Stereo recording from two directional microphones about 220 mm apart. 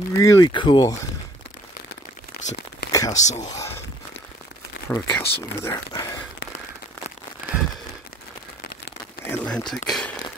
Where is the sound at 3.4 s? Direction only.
15° left (ahead or behind).